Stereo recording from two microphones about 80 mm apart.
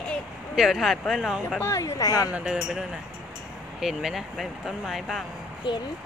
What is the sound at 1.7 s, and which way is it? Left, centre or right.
Speech, left.